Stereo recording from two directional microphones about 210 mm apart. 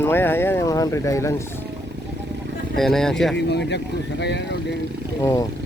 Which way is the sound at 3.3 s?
55° left (ahead or behind).